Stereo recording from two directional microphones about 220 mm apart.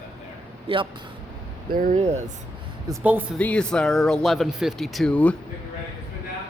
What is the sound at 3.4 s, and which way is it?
Speech, 5° left (ahead or behind).